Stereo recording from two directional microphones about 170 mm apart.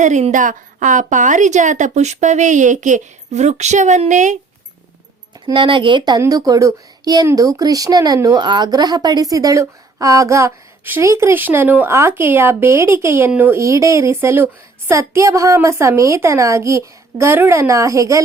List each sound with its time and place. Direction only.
0.0 s a woman's voice: 45° right (ahead or behind)
5.5 s speech: 30° right (ahead or behind)